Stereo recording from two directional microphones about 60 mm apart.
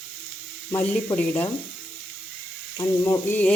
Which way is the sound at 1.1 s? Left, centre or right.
Left.